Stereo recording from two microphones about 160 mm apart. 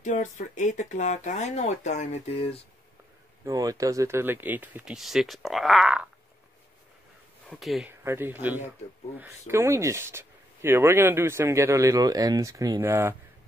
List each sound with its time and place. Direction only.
0.0 s speech: 50° left (ahead or behind)
3.4 s speech: 20° right (ahead or behind); by 6.0 s 5° right (ahead or behind)
7.4 s speech: centre (ahead or behind)
8.0 s speech: 15° right (ahead or behind)